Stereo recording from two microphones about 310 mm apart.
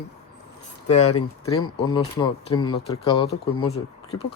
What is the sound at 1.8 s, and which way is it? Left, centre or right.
Speech, centre.